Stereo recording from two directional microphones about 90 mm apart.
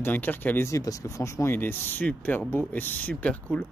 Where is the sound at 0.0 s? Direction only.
20° left (ahead or behind).